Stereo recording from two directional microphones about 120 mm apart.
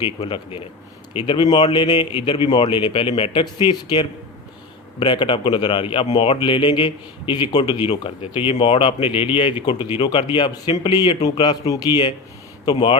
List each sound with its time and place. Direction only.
0.3 s speech: 45° left (ahead or behind)
3.4 s speech: 35° left (ahead or behind)
12.7 s speech: 45° left (ahead or behind)